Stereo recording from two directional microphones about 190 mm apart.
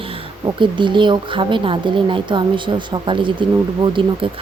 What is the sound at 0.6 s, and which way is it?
Speech, 25° right (ahead or behind).